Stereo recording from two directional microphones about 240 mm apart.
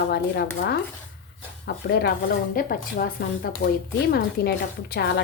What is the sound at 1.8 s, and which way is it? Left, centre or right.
Speech, left.